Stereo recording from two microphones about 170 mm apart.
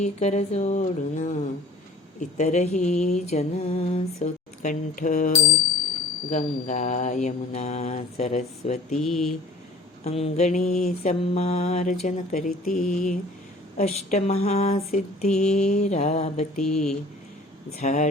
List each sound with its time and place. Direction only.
0.0 s mantra: 40° left (ahead or behind)
6.3 s mantra: 45° left (ahead or behind)
9.0 s speech: centre (ahead or behind)
10.0 s mantra: 40° left (ahead or behind)